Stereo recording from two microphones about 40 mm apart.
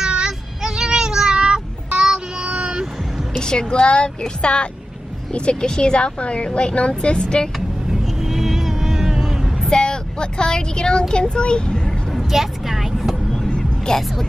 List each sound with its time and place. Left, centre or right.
0.0 s child singing: right
0.6 s meow: centre
2.0 s child singing: right
3.3 s a woman's voice: left
7.9 s vehicle: centre
9.7 s speech: centre
12.1 s vehicle: centre
13.6 s a sound: centre